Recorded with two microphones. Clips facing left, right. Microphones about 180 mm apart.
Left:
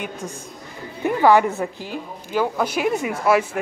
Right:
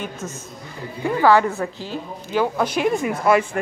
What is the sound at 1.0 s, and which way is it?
A woman's voice, 15° left (ahead or behind).